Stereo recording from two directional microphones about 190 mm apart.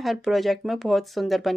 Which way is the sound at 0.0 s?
Centre (ahead or behind).